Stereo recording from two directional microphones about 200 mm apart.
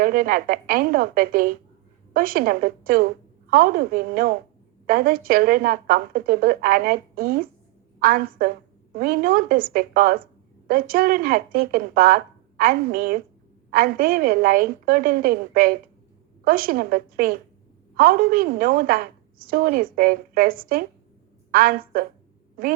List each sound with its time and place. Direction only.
0.0 s a woman's voice: 45° right (ahead or behind)